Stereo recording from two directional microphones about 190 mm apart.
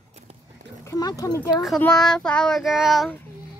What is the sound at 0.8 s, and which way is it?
Speech, 20° left (ahead or behind).